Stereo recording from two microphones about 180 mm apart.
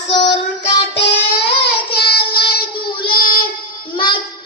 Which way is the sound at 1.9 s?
60° left (ahead or behind).